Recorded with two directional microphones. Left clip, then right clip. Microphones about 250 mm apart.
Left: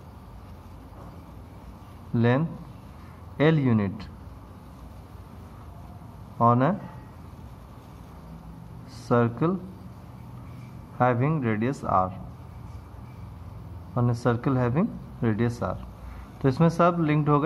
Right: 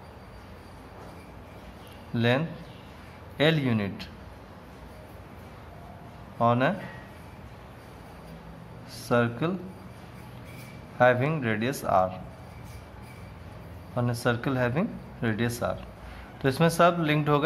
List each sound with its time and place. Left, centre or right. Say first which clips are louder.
2.1 s speech: left 1 dB; centre
6.3 s speech: left 2 dB; centre
9.0 s speech: left 2 dB; centre
11.0 s speech: right 2 dB; centre
13.9 s speech: left 1 dB; centre